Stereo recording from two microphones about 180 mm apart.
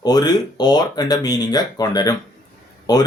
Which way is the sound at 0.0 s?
20° left (ahead or behind).